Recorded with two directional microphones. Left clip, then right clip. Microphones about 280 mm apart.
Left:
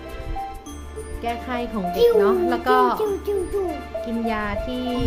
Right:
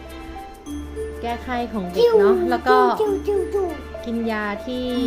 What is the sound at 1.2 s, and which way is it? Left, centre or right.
Speech, centre.